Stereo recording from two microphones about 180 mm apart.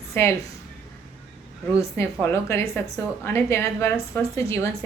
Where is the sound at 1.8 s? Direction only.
15° left (ahead or behind).